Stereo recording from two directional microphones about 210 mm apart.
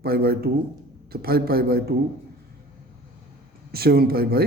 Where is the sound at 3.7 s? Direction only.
45° right (ahead or behind).